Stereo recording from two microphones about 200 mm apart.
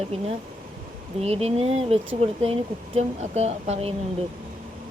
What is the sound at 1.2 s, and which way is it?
Speech, 30° right (ahead or behind).